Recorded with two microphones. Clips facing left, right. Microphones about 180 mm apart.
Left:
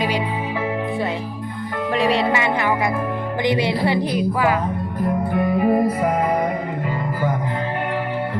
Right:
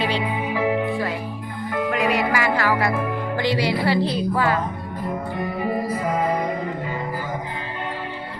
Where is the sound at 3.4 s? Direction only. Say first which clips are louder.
Left 2 dB; 20° left (ahead or behind).